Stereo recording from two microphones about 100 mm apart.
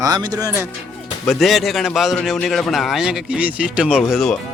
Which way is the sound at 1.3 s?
Centre (ahead or behind).